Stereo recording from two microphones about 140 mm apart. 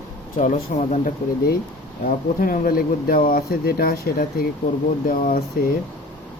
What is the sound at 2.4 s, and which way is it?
Speech, 90° left.